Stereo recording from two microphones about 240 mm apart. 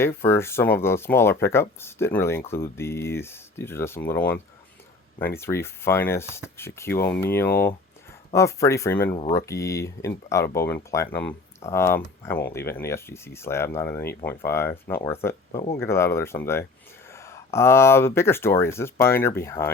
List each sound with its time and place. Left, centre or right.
0.0 s speech: centre